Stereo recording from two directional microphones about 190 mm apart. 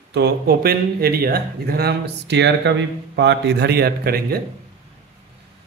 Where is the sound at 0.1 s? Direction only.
55° right (ahead or behind).